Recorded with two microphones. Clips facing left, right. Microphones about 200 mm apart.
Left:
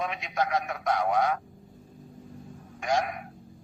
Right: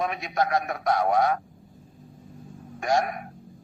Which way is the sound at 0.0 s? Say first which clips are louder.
Right 3 dB; 45° right (ahead or behind).